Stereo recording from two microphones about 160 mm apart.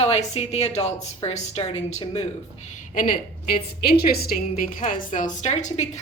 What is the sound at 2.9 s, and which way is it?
Speech, 60° left (ahead or behind).